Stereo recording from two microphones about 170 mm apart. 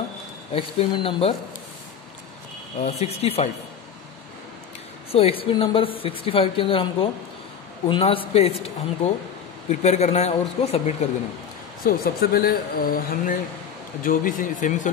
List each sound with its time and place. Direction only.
0.5 s a woman's voice: 35° left (ahead or behind)
2.8 s a woman's voice: 40° left (ahead or behind)
5.1 s a woman's voice: 35° left (ahead or behind)
11.8 s speech: 60° left (ahead or behind)